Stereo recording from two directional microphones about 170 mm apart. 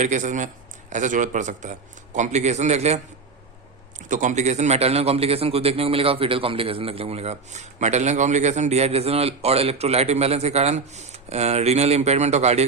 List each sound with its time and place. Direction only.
0.0 s a man's voice: 45° right (ahead or behind)
4.1 s a man's voice: 45° right (ahead or behind)